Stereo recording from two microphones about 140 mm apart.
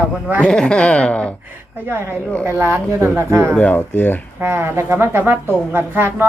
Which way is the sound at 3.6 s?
10° left (ahead or behind).